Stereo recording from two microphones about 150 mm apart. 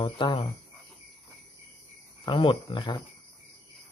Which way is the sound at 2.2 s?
35° left (ahead or behind).